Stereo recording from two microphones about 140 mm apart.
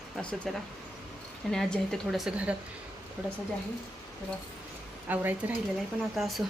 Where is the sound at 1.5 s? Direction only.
Centre (ahead or behind).